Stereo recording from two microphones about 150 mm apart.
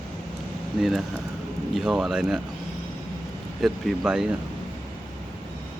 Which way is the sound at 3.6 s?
Centre (ahead or behind).